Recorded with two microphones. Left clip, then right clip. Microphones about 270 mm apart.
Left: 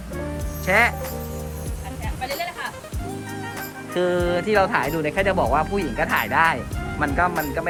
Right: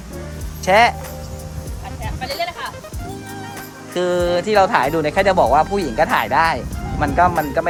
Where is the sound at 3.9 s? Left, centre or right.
Centre.